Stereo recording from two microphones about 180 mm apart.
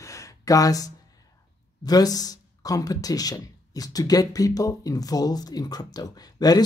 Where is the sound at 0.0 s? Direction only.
15° left (ahead or behind).